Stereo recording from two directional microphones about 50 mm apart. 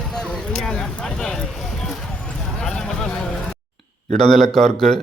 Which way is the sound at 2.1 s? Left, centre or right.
Left.